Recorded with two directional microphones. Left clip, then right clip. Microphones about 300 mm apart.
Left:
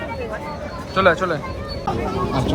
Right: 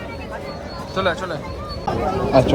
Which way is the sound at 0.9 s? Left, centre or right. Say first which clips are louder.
Left 5 dB; centre.